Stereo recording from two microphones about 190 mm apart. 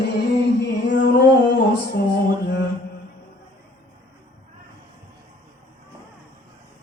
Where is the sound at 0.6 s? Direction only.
70° left (ahead or behind).